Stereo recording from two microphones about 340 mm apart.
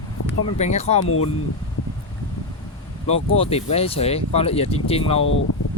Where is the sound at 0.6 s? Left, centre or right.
Centre.